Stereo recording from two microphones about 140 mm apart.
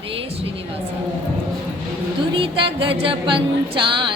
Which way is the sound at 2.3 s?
40° right (ahead or behind).